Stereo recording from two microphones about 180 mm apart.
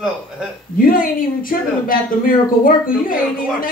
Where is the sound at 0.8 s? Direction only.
50° left (ahead or behind).